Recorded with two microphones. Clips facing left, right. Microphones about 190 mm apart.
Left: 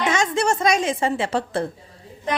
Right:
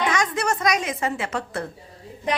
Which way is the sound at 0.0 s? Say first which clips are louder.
Left 3 dB; 25° left (ahead or behind).